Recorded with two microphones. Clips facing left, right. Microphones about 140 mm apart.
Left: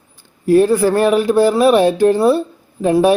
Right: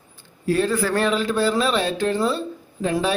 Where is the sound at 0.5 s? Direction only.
15° left (ahead or behind).